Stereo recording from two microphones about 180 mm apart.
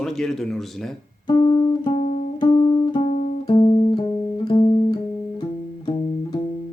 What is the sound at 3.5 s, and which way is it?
Music, 25° left (ahead or behind).